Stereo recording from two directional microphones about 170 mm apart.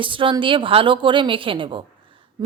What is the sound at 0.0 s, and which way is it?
A woman's voice, 30° right (ahead or behind).